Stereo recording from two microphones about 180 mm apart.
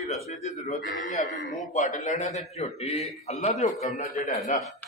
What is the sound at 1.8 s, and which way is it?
A man's voice, 45° left (ahead or behind).